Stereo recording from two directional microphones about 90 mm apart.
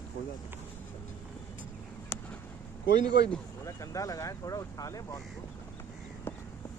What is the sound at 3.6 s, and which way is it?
Speech, 40° left (ahead or behind).